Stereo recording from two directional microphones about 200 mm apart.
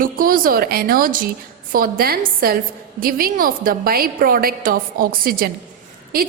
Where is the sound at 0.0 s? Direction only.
45° right (ahead or behind).